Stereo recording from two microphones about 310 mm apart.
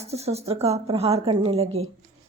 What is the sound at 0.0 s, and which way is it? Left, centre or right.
A woman's voice, centre.